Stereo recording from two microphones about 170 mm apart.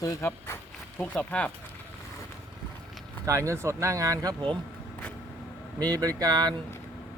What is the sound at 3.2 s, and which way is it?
Speech, 15° right (ahead or behind).